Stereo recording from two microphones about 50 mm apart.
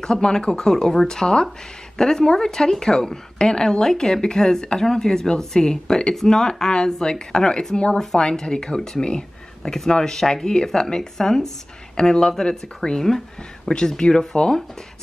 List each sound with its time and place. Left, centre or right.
0.0 s speech: centre